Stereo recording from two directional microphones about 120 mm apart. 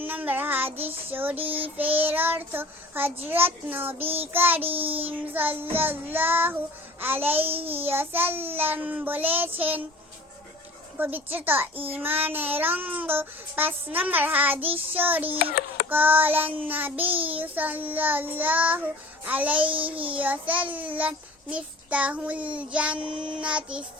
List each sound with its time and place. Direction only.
0.0 s child singing: 15° right (ahead or behind)
0.8 s child singing: 55° right (ahead or behind)
1.1 s child singing: 15° right (ahead or behind)
10.9 s child singing: 15° right (ahead or behind)